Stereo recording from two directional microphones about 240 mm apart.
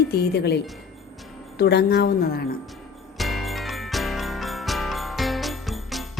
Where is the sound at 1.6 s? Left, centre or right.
Left.